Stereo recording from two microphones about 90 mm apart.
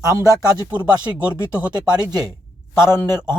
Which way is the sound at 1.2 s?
15° right (ahead or behind).